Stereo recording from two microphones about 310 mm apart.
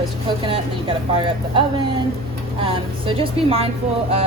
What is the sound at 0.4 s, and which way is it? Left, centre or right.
Speech, centre.